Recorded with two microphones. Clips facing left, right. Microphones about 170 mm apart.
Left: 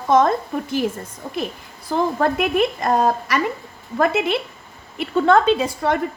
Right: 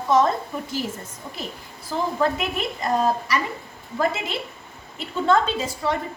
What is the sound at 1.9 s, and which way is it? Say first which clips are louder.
A woman's voice: left 4 dB; 55° left (ahead or behind).